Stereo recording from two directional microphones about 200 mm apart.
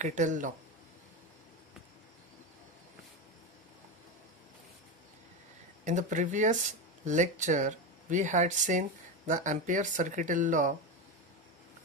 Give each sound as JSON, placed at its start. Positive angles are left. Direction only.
{"t": 0.0, "sound": "speech", "side_deg": -40}
{"t": 5.9, "sound": "speech", "side_deg": -40}